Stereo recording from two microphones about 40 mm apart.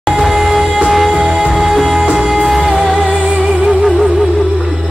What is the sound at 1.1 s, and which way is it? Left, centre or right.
Music, right.